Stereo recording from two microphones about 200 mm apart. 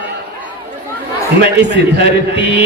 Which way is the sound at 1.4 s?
60° right (ahead or behind).